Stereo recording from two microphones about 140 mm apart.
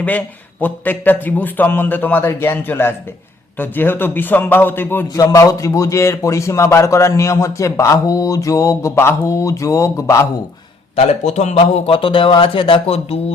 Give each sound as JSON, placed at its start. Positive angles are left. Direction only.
{"t": 0.6, "sound": "a man's voice", "side_deg": 10}
{"t": 10.9, "sound": "a man's voice", "side_deg": 50}
{"t": 11.9, "sound": "speech", "side_deg": 40}